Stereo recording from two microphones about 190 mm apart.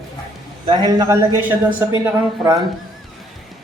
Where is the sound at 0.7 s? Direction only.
20° right (ahead or behind).